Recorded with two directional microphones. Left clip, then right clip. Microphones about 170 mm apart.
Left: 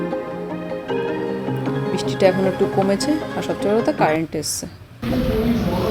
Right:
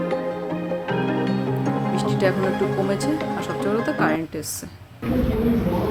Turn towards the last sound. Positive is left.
turn(degrees=15)  # may be behind; listen again after turning